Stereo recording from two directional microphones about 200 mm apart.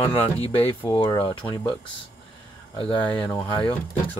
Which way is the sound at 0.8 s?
25° left (ahead or behind).